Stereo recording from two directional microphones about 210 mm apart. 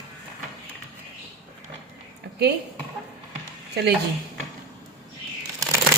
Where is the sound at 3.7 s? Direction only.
50° right (ahead or behind).